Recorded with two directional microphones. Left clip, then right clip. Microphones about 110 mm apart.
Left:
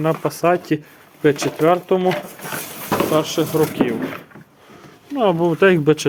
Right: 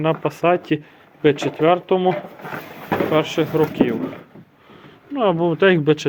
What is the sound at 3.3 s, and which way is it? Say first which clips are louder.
Speech: even; 35° left (ahead or behind).